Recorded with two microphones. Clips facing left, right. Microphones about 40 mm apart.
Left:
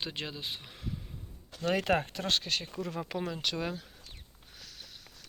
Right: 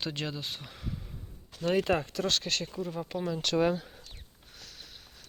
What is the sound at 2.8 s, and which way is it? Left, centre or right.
Speech, left.